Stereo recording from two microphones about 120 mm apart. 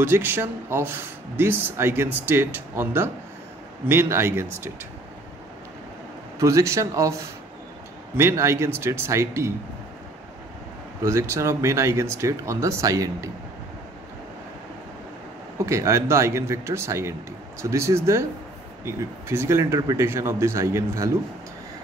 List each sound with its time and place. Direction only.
0.0 s speech: 15° right (ahead or behind)
6.4 s speech: 25° right (ahead or behind)
8.2 s speech: 20° right (ahead or behind)
11.0 s speech: 25° right (ahead or behind)
15.6 s speech: 25° right (ahead or behind)